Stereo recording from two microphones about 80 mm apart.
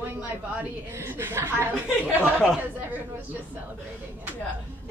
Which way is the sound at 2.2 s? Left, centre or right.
Centre.